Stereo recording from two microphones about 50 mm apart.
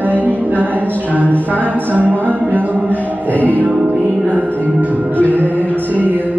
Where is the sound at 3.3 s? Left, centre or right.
Left.